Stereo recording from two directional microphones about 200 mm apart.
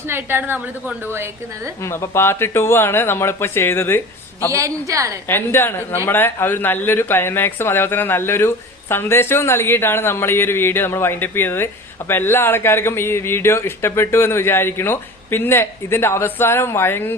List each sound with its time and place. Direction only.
0.0 s a woman's voice: 10° right (ahead or behind)
1.8 s speech: 15° left (ahead or behind)
4.4 s a woman's voice: 15° right (ahead or behind)
5.3 s speech: 10° left (ahead or behind)